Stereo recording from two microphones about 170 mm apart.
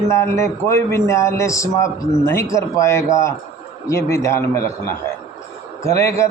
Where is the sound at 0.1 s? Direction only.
15° left (ahead or behind).